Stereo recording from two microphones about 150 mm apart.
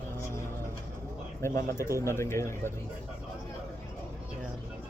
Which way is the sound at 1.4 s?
20° left (ahead or behind).